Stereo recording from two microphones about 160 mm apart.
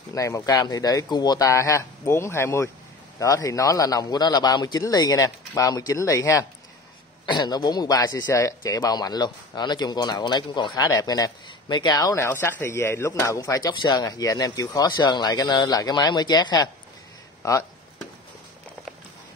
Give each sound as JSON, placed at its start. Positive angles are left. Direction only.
{"t": 0.1, "sound": "speech", "side_deg": 20}